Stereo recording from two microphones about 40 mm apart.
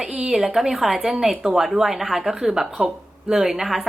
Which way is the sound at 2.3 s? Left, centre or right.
Right.